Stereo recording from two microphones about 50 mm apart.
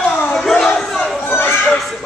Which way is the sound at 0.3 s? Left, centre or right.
Centre.